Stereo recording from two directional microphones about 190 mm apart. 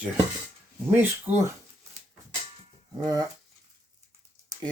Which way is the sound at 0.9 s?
10° right (ahead or behind).